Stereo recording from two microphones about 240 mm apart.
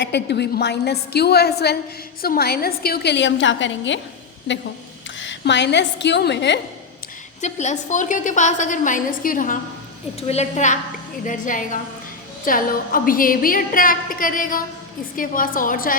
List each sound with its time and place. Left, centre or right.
0.0 s a woman's voice: left
5.2 s a woman's voice: left
7.4 s a woman's voice: left